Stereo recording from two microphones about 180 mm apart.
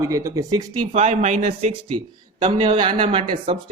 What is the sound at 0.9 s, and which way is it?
Speech, 35° right (ahead or behind).